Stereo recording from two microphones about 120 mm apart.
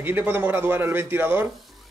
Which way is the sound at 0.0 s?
15° right (ahead or behind).